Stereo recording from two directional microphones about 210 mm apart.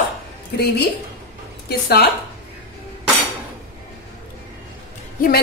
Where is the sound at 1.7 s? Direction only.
50° left (ahead or behind).